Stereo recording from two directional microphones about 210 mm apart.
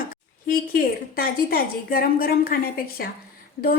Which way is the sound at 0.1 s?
40° left (ahead or behind).